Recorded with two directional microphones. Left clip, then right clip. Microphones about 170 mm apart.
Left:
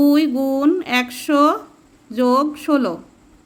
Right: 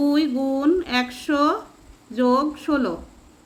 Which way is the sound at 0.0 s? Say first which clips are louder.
Left 5 dB; 45° left (ahead or behind).